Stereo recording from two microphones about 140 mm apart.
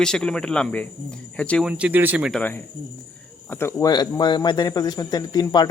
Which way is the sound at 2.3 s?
10° left (ahead or behind).